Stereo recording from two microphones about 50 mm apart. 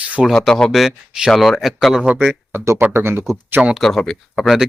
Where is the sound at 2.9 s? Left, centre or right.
Right.